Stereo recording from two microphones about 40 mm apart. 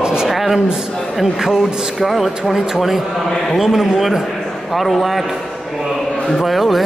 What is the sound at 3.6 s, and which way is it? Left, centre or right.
A man's voice, centre.